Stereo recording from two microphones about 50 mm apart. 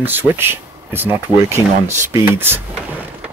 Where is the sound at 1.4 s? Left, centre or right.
Right.